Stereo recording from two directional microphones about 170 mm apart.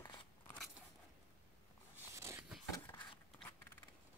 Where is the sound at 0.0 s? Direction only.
25° left (ahead or behind).